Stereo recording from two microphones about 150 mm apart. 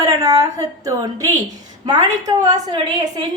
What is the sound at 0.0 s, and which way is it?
A woman's voice, 25° right (ahead or behind).